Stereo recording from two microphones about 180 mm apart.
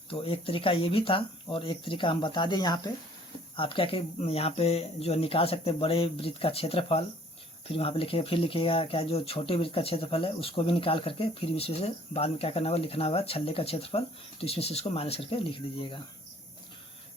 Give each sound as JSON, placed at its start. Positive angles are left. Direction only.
{"t": 0.1, "sound": "speech", "side_deg": 30}